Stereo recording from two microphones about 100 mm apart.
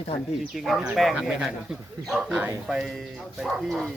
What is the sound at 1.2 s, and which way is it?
Speech, 5° right (ahead or behind).